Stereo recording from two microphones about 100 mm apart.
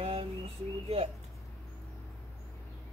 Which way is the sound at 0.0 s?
65° right (ahead or behind).